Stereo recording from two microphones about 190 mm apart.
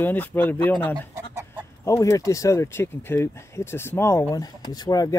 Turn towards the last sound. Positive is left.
turn(degrees=20)  # may be behind; listen again after turning